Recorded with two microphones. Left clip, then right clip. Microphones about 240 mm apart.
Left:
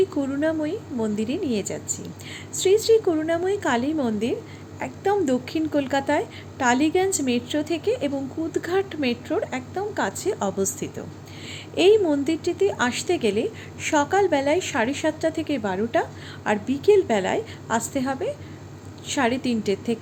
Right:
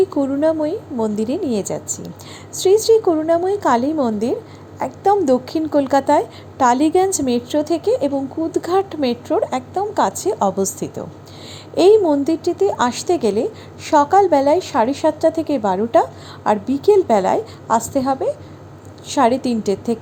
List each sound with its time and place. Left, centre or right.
0.2 s a woman's voice: centre